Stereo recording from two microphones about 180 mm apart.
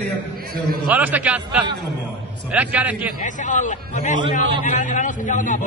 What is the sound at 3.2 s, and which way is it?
A man's voice, 45° left (ahead or behind).